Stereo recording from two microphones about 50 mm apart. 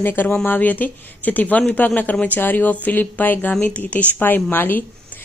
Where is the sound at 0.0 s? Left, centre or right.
Left.